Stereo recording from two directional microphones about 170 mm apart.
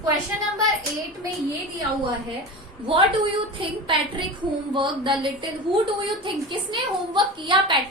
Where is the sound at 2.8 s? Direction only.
30° right (ahead or behind).